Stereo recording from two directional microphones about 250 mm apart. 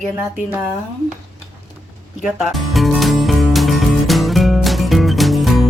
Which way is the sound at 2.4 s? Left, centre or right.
Centre.